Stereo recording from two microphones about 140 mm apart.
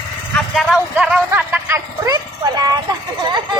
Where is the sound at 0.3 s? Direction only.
Centre (ahead or behind).